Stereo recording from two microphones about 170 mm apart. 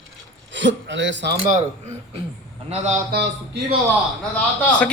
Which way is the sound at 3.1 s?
80° right.